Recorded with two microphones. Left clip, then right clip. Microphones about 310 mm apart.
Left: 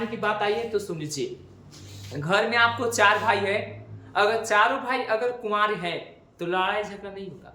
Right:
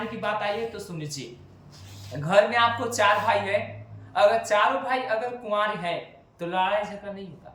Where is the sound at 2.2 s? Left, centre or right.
Centre.